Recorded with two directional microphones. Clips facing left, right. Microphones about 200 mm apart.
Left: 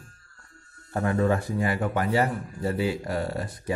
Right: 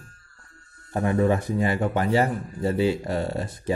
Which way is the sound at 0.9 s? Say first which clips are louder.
Right 2 dB; 20° right (ahead or behind).